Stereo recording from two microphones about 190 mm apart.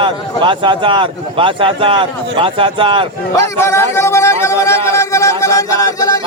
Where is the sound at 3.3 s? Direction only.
15° left (ahead or behind).